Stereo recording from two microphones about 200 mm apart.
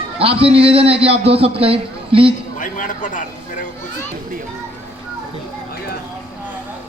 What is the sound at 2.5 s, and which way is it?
Speech, 40° left (ahead or behind).